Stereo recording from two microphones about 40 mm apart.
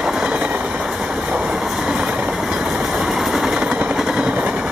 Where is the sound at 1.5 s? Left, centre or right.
Centre.